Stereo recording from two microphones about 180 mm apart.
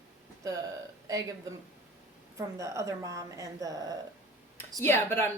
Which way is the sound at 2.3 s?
15° right (ahead or behind).